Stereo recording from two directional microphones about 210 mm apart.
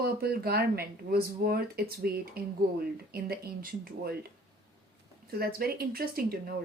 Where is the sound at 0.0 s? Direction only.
50° right (ahead or behind).